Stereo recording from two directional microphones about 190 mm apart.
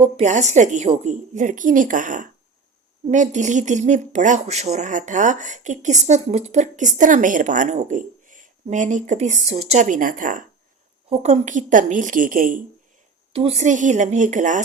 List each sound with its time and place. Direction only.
0.0 s a woman's voice: 35° right (ahead or behind)
13.3 s speech: 30° right (ahead or behind)